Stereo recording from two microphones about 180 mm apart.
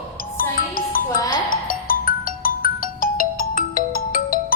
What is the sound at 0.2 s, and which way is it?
Music, 50° left (ahead or behind).